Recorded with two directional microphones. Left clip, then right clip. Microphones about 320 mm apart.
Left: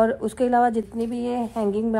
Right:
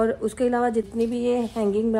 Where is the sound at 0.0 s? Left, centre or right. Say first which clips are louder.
Left 2 dB; centre.